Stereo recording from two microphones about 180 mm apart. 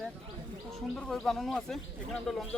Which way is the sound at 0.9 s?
5° left (ahead or behind).